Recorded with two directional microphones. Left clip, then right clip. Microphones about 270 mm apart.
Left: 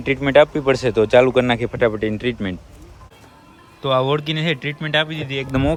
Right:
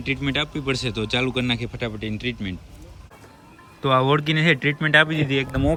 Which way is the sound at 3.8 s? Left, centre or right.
Centre.